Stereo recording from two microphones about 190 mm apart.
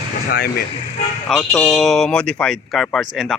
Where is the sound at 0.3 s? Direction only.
55° left (ahead or behind).